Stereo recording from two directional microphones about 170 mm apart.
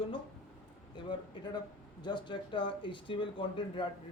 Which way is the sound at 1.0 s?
30° left (ahead or behind).